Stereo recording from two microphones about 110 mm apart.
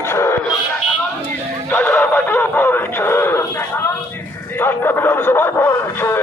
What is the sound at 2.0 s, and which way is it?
Radio, 20° left (ahead or behind).